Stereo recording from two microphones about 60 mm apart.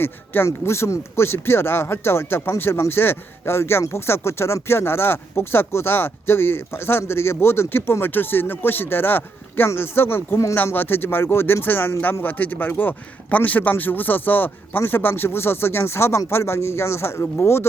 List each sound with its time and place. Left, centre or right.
0.0 s speech: left